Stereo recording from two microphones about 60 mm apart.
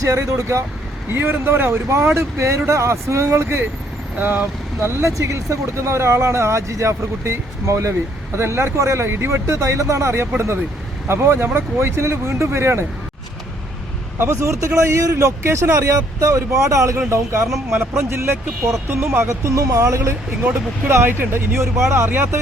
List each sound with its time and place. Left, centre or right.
0.0 s speech: right
1.1 s speech: right
4.2 s speech: right
4.8 s speech: right
14.2 s speech: right
15.8 s speech: right
17.7 s speech: right
19.0 s speech: right
19.3 s speech: right
20.4 s speech: right